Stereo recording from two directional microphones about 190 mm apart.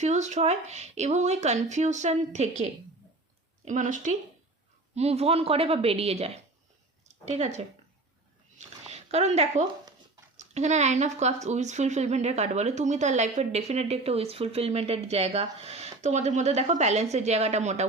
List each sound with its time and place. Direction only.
0.0 s speech: 35° right (ahead or behind)
3.7 s speech: 40° right (ahead or behind)
8.5 s a sound: 35° right (ahead or behind)
10.3 s speech: 35° right (ahead or behind)